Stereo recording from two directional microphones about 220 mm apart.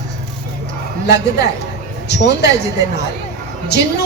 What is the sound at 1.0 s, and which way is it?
A woman's voice, 50° left (ahead or behind).